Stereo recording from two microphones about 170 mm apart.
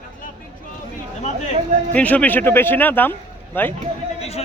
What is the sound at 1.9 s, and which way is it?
A man's voice, 10° left (ahead or behind).